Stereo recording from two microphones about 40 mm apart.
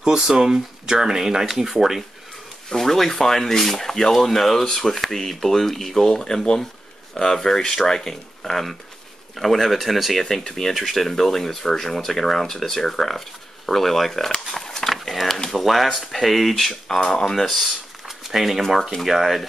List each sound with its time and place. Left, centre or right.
0.0 s speech: centre
2.7 s speech: centre
10.2 s speech: centre
14.5 s pig: centre
15.0 s speech: centre
16.8 s speech: centre
18.0 s a sound: centre
19.0 s speech: centre